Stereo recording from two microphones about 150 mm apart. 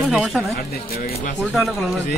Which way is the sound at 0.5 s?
90° left.